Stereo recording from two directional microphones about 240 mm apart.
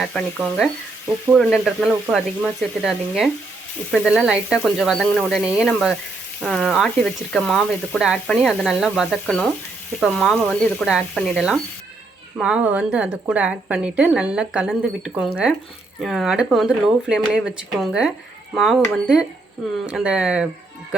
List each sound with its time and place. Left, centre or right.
0.0 s a woman's voice: centre
1.3 s a woman's voice: centre